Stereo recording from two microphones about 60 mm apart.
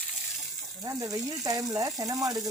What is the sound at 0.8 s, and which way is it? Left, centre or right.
Speech, right.